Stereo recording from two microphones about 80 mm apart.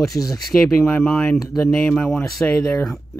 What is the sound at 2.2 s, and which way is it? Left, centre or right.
Speech, centre.